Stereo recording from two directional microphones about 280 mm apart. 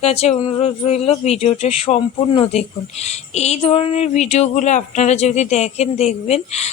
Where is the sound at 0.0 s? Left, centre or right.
Left.